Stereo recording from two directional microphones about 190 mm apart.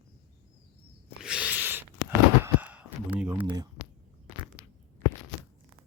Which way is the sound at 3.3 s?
25° right (ahead or behind).